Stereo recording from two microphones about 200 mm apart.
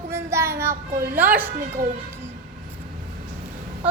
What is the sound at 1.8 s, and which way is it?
Speech, 45° right (ahead or behind).